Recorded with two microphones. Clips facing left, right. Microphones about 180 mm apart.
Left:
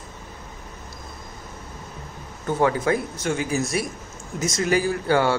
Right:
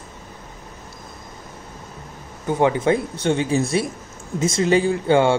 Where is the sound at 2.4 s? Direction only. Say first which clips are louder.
Right 3 dB; 20° right (ahead or behind).